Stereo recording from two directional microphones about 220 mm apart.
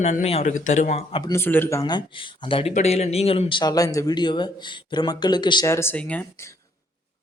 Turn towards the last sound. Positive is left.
turn(degrees=5)  # may be behind; listen again after turning